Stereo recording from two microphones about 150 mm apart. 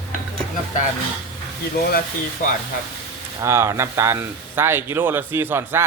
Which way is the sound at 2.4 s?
65° left (ahead or behind).